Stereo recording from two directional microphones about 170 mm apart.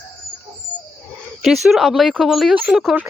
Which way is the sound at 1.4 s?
Centre (ahead or behind).